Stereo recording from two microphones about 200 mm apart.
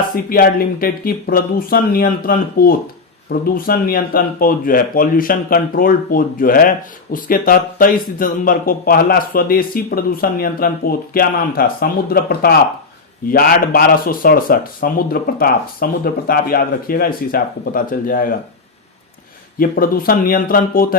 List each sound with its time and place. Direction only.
0.3 s speech: 45° left (ahead or behind)
19.5 s speech: 45° left (ahead or behind)